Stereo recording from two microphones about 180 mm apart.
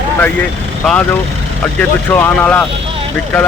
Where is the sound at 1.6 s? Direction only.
10° left (ahead or behind).